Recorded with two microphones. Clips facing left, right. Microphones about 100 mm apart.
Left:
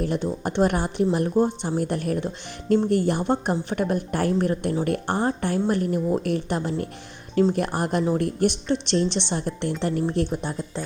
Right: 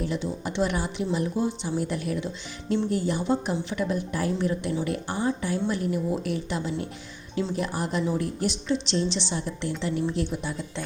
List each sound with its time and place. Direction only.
0.0 s speech: 50° left (ahead or behind)